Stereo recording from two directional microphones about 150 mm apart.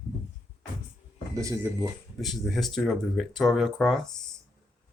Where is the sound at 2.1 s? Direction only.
Centre (ahead or behind).